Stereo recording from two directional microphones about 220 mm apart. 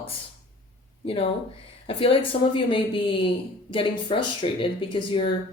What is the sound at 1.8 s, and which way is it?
Speech, 25° left (ahead or behind).